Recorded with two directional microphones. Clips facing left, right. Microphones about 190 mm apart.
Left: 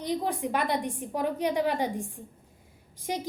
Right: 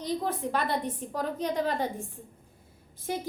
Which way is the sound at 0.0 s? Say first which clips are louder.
Left 1 dB; 15° left (ahead or behind).